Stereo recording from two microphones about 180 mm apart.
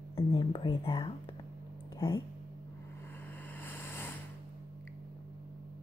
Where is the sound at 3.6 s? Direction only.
10° left (ahead or behind).